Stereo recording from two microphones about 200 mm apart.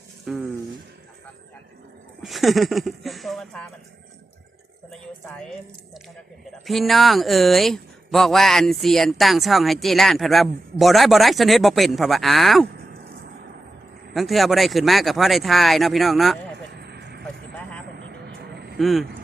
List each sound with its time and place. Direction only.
0.3 s speech: 5° right (ahead or behind)
2.2 s speech: centre (ahead or behind)
4.9 s speech: 5° left (ahead or behind)
14.1 s speech: centre (ahead or behind)
16.7 s vehicle: 55° right (ahead or behind)
17.2 s vehicle: 5° left (ahead or behind)
17.8 s vehicle: 55° right (ahead or behind)
18.8 s speech: centre (ahead or behind)